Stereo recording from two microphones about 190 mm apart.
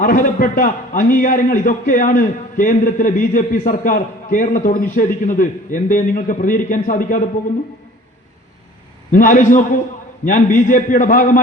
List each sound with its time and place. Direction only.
0.0 s a man's voice: 50° left (ahead or behind)
9.1 s a man's voice: 45° left (ahead or behind)